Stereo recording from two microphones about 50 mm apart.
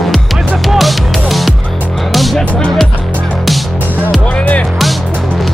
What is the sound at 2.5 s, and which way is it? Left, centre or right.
Music, centre.